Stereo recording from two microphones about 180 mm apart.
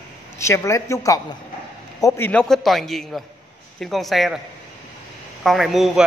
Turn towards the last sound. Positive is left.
turn(degrees=0)  # may be behind; listen again after turning